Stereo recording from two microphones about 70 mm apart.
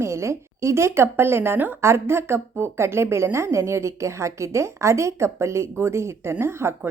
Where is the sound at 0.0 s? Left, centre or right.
Right.